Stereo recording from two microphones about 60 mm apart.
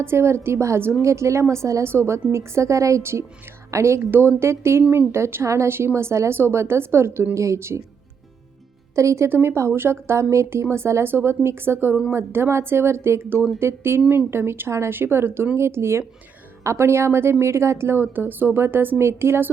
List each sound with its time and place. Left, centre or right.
0.0 s speech: right
1.8 s speech: right
4.0 s speech: right
7.3 s speech: right
9.0 s speech: right
9.3 s speech: right
11.0 s a woman's voice: right